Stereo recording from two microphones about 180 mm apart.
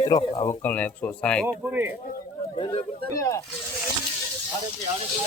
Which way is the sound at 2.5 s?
30° left (ahead or behind).